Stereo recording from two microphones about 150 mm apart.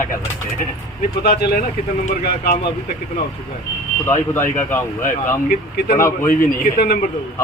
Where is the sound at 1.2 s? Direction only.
90° left.